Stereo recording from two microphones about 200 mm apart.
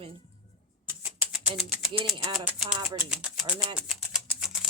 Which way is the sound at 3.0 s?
5° right (ahead or behind).